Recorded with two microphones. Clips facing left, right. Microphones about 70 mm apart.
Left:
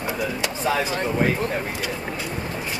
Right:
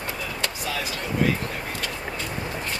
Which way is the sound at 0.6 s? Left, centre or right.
Left.